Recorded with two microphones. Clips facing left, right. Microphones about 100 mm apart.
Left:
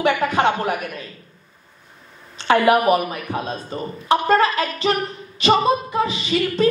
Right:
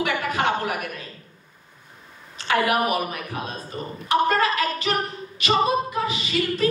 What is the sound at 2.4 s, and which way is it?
A woman's voice, 30° left (ahead or behind).